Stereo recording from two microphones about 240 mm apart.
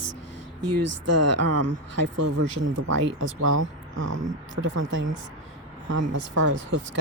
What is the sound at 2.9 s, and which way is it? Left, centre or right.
Speech, right.